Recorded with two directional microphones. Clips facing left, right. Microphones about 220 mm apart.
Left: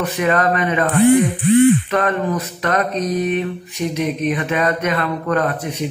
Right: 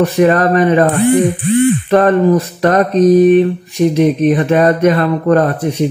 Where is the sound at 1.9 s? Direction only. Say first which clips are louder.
Right 9 dB; 40° right (ahead or behind).